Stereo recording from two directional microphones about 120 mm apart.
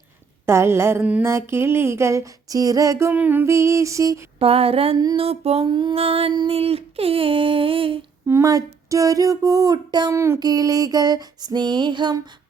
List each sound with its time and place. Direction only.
0.4 s female singing: 20° right (ahead or behind)
3.1 s female singing: 15° right (ahead or behind)
4.4 s a sound: 55° right (ahead or behind)
6.3 s speech: 40° right (ahead or behind)
6.6 s a sound: 55° right (ahead or behind)
8.3 s speech: 25° right (ahead or behind)
10.2 s female singing: 20° right (ahead or behind)
10.4 s speech: 30° right (ahead or behind)